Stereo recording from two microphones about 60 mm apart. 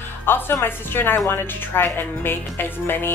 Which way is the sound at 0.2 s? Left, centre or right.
Left.